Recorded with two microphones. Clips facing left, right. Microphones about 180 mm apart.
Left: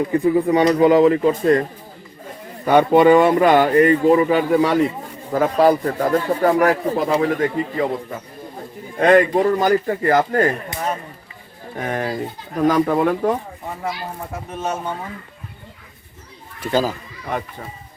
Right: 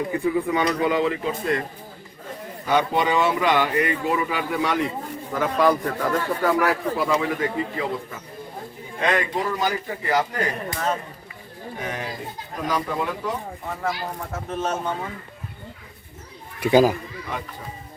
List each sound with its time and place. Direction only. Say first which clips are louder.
0.1 s speech: left 8 dB; 40° left (ahead or behind)
2.6 s speech: left 9 dB; 55° left (ahead or behind)
9.0 s speech: left 10 dB; 50° left (ahead or behind)
11.8 s speech: left 8 dB; 50° left (ahead or behind)
14.3 s speech: left 1 dB; 10° left (ahead or behind)
16.6 s a child's voice: right 4 dB; 10° right (ahead or behind)